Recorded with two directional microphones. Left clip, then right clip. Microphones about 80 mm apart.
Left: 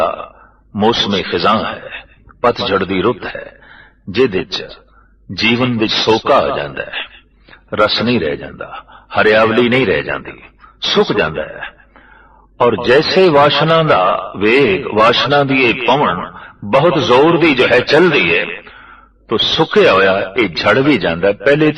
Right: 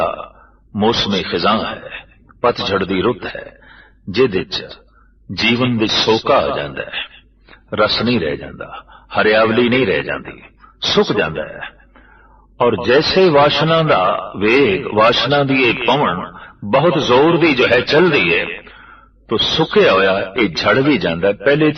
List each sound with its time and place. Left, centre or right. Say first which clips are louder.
0.0 s burping: left 3 dB; right
0.7 s a man's voice: left 2 dB; right
13.9 s a man's voice: left 2 dB; right